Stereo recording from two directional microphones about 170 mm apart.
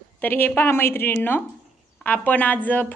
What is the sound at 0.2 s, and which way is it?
A woman's voice, 10° left (ahead or behind).